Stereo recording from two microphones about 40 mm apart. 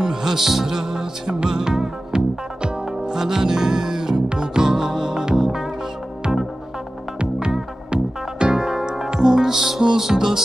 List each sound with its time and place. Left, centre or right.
0.0 s music: centre
7.3 s music: centre